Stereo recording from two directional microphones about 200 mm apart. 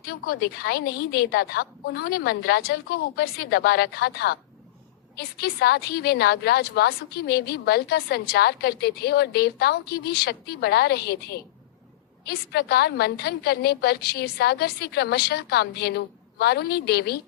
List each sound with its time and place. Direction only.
0.0 s a woman's voice: 50° left (ahead or behind)